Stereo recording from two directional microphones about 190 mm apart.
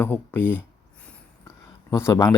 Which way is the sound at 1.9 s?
15° left (ahead or behind).